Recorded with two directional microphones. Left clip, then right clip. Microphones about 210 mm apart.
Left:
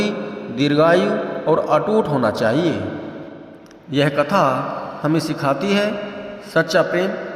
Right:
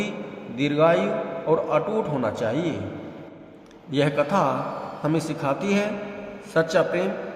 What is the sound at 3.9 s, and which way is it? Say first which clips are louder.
A man's voice: left 5 dB; 15° left (ahead or behind).